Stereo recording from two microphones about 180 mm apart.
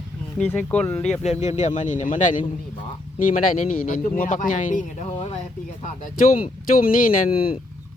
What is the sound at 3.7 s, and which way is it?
Speech, 50° left (ahead or behind).